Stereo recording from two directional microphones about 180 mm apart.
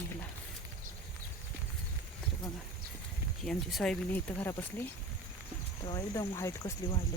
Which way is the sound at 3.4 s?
5° left (ahead or behind).